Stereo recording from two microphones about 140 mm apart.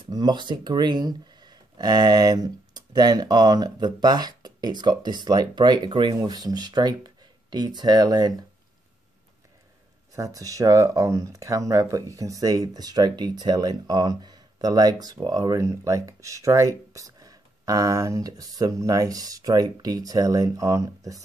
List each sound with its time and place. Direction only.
0.1 s speech: 30° right (ahead or behind)
10.1 s speech: 25° right (ahead or behind)